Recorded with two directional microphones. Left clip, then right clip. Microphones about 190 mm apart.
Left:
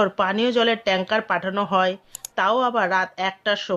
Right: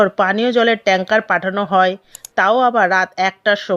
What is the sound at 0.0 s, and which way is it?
A woman's voice, 20° right (ahead or behind).